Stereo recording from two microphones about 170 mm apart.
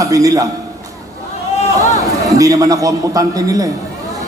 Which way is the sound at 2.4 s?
20° right (ahead or behind).